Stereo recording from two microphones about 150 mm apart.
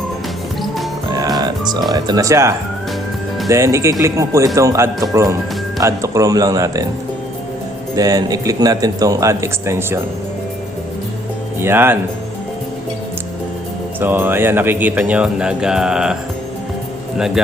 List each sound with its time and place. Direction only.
1.1 s music: 25° right (ahead or behind)
1.9 s speech: 25° right (ahead or behind)
3.5 s speech: 20° right (ahead or behind)
7.9 s speech: 25° right (ahead or behind)
11.6 s speech: 15° right (ahead or behind)
14.0 s speech: 15° right (ahead or behind)
17.2 s speech: 5° right (ahead or behind)